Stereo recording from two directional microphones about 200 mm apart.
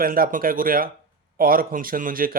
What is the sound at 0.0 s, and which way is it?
Speech, 45° right (ahead or behind).